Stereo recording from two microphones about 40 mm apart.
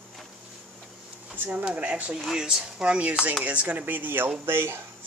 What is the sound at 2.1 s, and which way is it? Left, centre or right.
Speech, centre.